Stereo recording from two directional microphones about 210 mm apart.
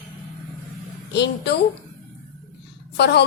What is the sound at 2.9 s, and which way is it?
Speech, 55° left (ahead or behind).